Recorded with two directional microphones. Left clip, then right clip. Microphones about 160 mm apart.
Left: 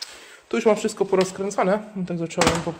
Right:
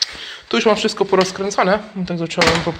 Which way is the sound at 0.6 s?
25° left (ahead or behind).